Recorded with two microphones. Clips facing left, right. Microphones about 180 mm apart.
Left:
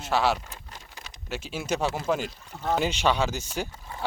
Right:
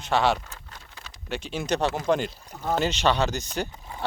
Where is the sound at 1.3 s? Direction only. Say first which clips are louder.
Right 2 dB; 5° left (ahead or behind).